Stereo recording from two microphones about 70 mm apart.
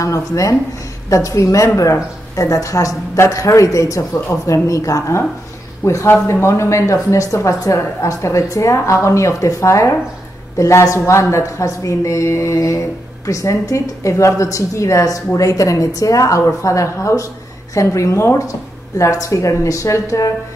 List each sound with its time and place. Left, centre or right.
0.0 s a woman's voice: left